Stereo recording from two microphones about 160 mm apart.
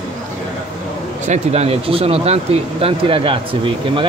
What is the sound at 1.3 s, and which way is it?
Speech, 40° right (ahead or behind).